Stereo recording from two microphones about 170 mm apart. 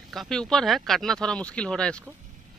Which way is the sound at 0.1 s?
5° left (ahead or behind).